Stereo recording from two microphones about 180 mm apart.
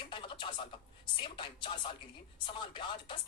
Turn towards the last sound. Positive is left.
turn(degrees=30)  # may be behind; listen again after turning